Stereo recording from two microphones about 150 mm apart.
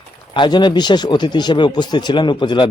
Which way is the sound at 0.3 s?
30° left (ahead or behind).